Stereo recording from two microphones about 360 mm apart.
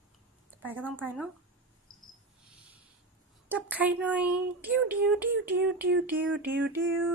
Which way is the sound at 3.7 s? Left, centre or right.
Centre.